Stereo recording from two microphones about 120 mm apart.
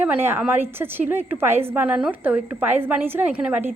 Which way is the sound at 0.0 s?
15° right (ahead or behind).